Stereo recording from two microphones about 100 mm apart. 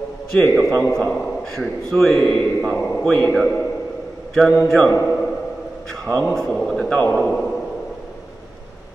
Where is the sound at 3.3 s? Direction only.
Centre (ahead or behind).